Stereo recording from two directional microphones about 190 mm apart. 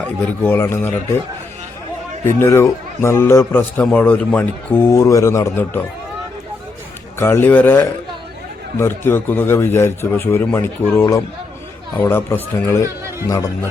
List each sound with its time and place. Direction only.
0.0 s a man's voice: 10° left (ahead or behind)
2.2 s a man's voice: 10° left (ahead or behind)
7.2 s a man's voice: 10° left (ahead or behind)